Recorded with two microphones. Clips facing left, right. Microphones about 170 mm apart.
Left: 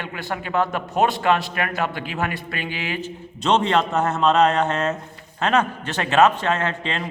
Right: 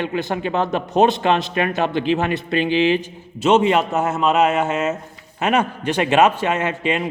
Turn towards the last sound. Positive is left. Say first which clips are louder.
# right 5 dB
turn(degrees=-10)  # may be behind; listen again after turning